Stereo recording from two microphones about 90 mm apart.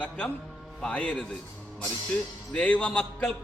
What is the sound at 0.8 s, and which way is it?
Speech, 15° left (ahead or behind).